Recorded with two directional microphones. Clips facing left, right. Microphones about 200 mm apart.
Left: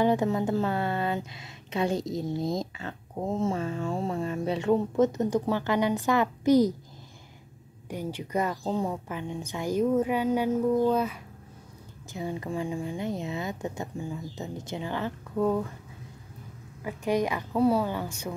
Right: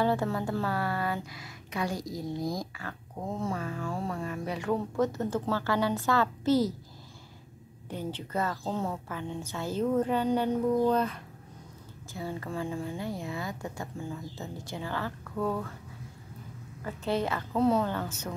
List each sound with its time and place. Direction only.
0.0 s speech: 20° left (ahead or behind)
7.9 s a woman's voice: 10° left (ahead or behind)
12.1 s a woman's voice: 20° left (ahead or behind)
16.8 s a woman's voice: 15° left (ahead or behind)